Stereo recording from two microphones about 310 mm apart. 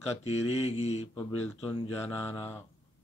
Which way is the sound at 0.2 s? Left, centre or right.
Centre.